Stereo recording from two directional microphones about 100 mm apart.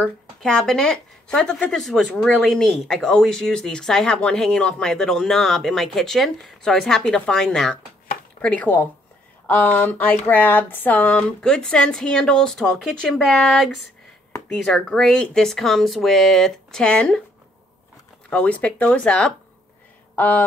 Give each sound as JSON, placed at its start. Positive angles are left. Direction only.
{"t": 0.0, "sound": "speech", "side_deg": 10}
{"t": 18.3, "sound": "speech", "side_deg": 10}